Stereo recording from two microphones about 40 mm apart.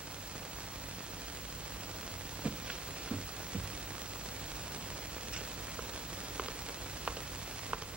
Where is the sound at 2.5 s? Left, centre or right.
Right.